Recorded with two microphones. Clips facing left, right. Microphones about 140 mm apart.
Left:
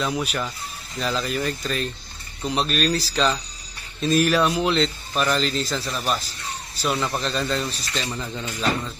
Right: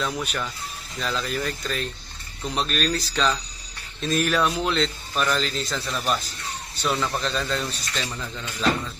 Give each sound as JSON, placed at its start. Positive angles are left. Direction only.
{"t": 0.0, "sound": "a man's voice", "side_deg": 5}
{"t": 8.4, "sound": "speech", "side_deg": 15}